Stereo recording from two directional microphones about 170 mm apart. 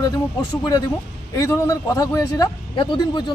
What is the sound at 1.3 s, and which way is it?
Speech, 20° left (ahead or behind).